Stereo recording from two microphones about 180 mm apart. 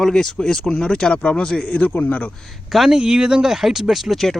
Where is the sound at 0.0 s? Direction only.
5° left (ahead or behind).